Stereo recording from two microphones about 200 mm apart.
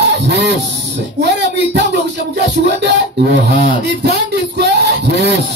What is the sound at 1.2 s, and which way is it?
Speech, 60° right (ahead or behind).